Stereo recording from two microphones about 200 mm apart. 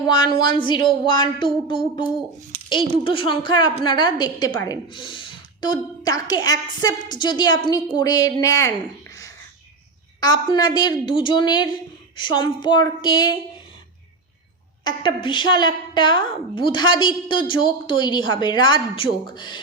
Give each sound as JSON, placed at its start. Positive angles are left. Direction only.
{"t": 0.0, "sound": "a woman's voice", "side_deg": 20}
{"t": 10.2, "sound": "a woman's voice", "side_deg": 20}
{"t": 14.8, "sound": "a woman's voice", "side_deg": 25}